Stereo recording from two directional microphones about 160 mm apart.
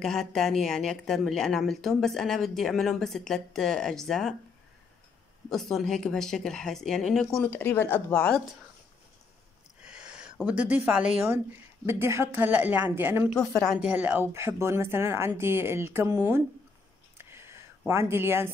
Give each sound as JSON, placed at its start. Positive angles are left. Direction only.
{"t": 0.0, "sound": "a woman's voice", "side_deg": 0}
{"t": 5.5, "sound": "a woman's voice", "side_deg": 0}
{"t": 7.5, "sound": "speech", "side_deg": 15}
{"t": 9.8, "sound": "a sound", "side_deg": -5}
{"t": 10.4, "sound": "speech", "side_deg": -10}
{"t": 17.2, "sound": "a sound", "side_deg": -15}